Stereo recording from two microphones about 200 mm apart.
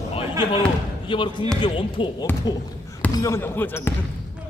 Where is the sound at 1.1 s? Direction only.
25° left (ahead or behind).